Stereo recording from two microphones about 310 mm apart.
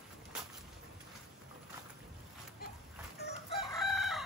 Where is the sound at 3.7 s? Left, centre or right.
Centre.